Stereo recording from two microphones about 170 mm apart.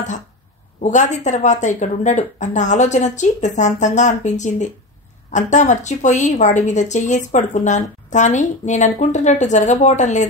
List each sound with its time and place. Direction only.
0.7 s speech: 45° left (ahead or behind)